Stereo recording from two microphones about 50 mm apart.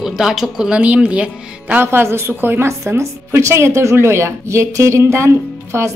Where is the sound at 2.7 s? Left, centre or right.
Right.